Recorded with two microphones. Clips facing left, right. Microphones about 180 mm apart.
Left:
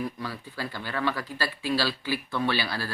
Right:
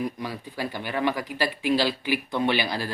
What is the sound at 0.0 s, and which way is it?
Speech, 15° right (ahead or behind).